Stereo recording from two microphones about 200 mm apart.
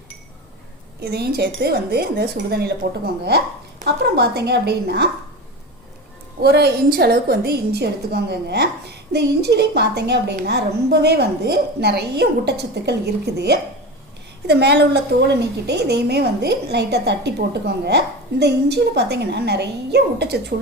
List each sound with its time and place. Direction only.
1.0 s a woman's voice: 55° right (ahead or behind)
6.4 s a woman's voice: 55° right (ahead or behind)